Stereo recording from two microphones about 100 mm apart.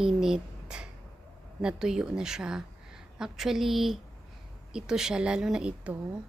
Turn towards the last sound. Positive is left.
turn(degrees=-10)  # may be behind; listen again after turning